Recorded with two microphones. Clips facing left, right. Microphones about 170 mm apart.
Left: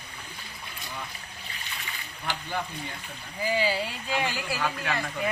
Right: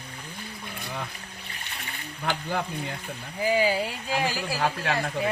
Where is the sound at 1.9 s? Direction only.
55° right (ahead or behind).